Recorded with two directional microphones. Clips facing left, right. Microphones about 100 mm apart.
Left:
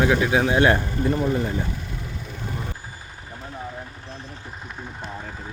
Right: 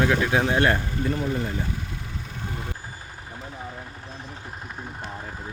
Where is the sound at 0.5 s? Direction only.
25° left (ahead or behind).